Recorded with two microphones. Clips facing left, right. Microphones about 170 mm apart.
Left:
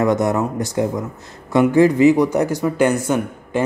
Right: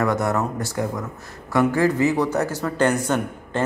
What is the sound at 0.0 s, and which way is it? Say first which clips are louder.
Speech: left 4 dB; 20° left (ahead or behind).